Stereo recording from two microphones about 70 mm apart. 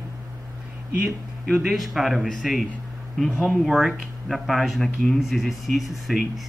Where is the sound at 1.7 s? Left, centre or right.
Centre.